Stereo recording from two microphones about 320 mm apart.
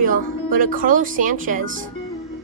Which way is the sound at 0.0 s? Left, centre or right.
Right.